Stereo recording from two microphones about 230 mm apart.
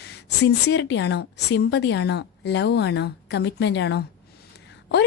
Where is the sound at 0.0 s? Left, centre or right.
Left.